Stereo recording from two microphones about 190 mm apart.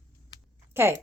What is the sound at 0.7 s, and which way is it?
Speech, 10° right (ahead or behind).